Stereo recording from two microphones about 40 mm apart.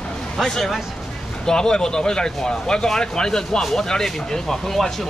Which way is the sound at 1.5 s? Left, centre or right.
Centre.